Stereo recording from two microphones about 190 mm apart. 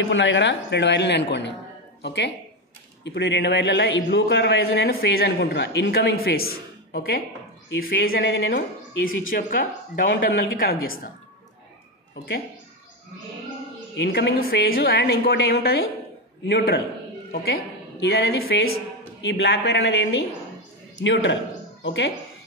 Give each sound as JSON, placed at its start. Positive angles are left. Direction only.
{"t": 0.0, "sound": "a man's voice", "side_deg": 75}
{"t": 8.3, "sound": "a man's voice", "side_deg": 65}
{"t": 13.9, "sound": "a man's voice", "side_deg": 65}
{"t": 18.0, "sound": "a man's voice", "side_deg": 55}